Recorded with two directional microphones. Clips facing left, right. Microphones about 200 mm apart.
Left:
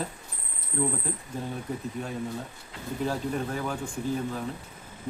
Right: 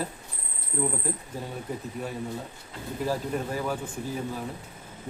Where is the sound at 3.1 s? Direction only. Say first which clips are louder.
Right 2 dB; 5° right (ahead or behind).